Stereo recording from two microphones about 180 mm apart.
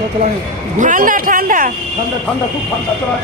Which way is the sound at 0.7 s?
45° right (ahead or behind).